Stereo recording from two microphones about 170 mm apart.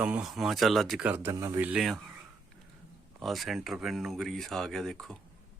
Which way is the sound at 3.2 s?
Centre (ahead or behind).